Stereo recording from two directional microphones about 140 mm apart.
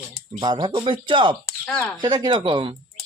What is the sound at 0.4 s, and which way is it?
Speech, 30° right (ahead or behind).